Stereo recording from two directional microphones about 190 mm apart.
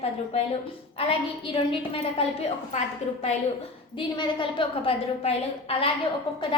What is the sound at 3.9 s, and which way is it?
A woman's voice, 25° left (ahead or behind).